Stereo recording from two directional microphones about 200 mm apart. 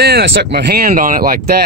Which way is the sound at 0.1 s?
55° right (ahead or behind).